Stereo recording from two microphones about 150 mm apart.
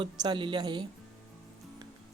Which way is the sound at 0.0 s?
30° right (ahead or behind).